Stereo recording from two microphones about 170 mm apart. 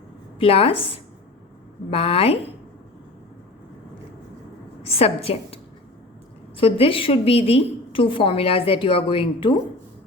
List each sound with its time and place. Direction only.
0.3 s a woman's voice: 35° left (ahead or behind)
1.9 s a woman's voice: 35° left (ahead or behind)
4.9 s a woman's voice: 35° left (ahead or behind)
6.6 s a woman's voice: 35° left (ahead or behind)